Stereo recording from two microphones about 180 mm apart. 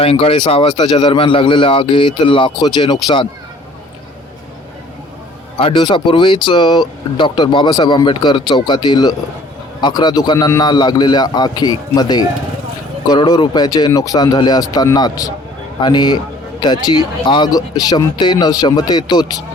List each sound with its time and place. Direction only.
0.0 s speech: 30° left (ahead or behind)
5.5 s speech: 30° left (ahead or behind)